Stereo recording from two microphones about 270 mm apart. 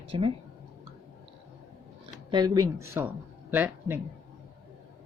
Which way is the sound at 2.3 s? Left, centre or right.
Centre.